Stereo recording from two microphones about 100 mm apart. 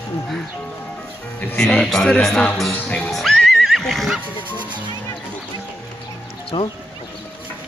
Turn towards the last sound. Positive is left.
turn(degrees=55)  # may be behind; listen again after turning